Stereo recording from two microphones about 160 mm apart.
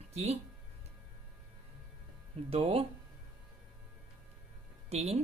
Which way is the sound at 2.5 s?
40° right (ahead or behind).